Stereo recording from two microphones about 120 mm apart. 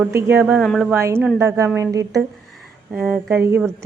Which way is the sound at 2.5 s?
10° right (ahead or behind).